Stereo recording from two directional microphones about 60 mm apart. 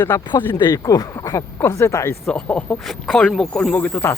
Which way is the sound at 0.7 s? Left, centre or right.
Left.